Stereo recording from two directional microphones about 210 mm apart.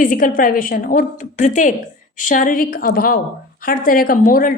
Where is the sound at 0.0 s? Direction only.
40° left (ahead or behind).